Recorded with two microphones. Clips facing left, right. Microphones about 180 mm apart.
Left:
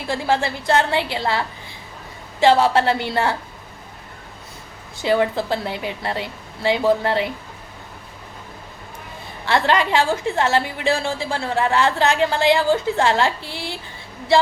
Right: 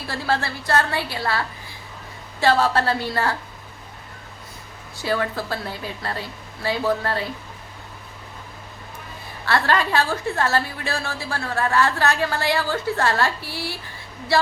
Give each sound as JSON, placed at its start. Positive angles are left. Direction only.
{"t": 0.1, "sound": "a woman's voice", "side_deg": 20}
{"t": 5.0, "sound": "a woman's voice", "side_deg": 20}
{"t": 9.5, "sound": "a woman's voice", "side_deg": 20}